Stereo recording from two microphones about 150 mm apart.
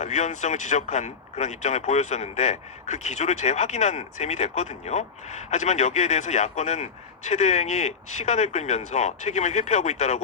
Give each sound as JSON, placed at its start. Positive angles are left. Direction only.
{"t": 0.0, "sound": "speech", "side_deg": 50}